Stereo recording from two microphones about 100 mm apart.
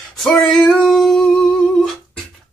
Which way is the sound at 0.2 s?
5° left (ahead or behind).